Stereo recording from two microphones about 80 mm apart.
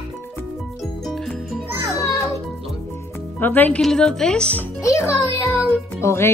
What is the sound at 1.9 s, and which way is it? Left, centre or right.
Music, left.